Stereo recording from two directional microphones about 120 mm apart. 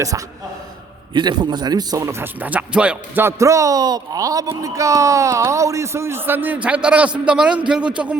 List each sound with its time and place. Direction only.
1.1 s speech: 40° right (ahead or behind); by 3.2 s 10° right (ahead or behind)
3.2 s a man's voice: 25° right (ahead or behind); by 8.1 s 10° right (ahead or behind)